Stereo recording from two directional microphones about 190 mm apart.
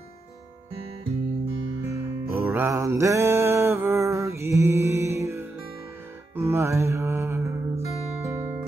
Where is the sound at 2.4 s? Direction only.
15° right (ahead or behind).